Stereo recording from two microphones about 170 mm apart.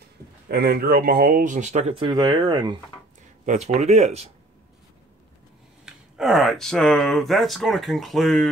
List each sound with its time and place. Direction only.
0.5 s speech: 70° right (ahead or behind); by 2.0 s 45° right (ahead or behind)
2.0 s speech: 30° right (ahead or behind)
3.4 s speech: 40° right (ahead or behind)
5.9 s speech: centre (ahead or behind)